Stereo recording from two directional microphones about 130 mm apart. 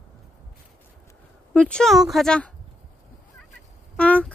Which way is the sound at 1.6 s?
5° left (ahead or behind).